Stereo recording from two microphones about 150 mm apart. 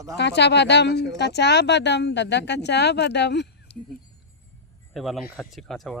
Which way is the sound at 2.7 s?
90° left.